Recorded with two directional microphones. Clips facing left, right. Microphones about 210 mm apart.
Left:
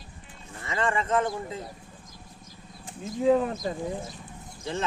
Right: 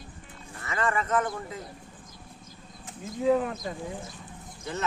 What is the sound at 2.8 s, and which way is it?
Speech, 30° left (ahead or behind).